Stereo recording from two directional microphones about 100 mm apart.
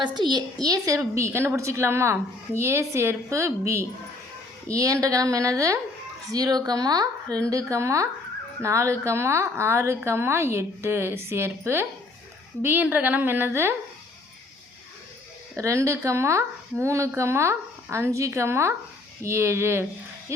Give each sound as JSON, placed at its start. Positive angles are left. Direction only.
{"t": 0.0, "sound": "a woman's voice", "side_deg": -50}
{"t": 4.7, "sound": "a woman's voice", "side_deg": -35}
{"t": 15.5, "sound": "a woman's voice", "side_deg": -30}